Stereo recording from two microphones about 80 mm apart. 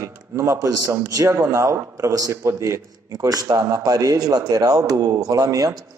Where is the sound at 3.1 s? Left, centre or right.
Right.